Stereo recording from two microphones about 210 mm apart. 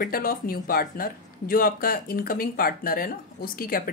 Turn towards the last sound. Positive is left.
turn(degrees=45)  # may be behind; listen again after turning